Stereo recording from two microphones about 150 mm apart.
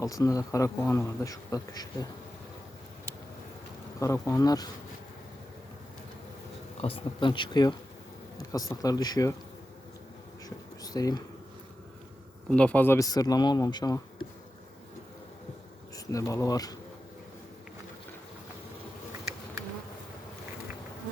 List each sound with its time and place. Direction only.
0.0 s speech: 20° left (ahead or behind)
4.0 s speech: 20° left (ahead or behind)
6.8 s speech: 35° left (ahead or behind)
10.8 s speech: 25° left (ahead or behind)
12.5 s speech: 10° left (ahead or behind); by 14.3 s 25° left (ahead or behind)
16.1 s speech: 20° left (ahead or behind)